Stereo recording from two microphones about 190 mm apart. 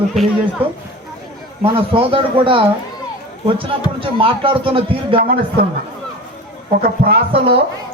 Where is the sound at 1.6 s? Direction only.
30° right (ahead or behind).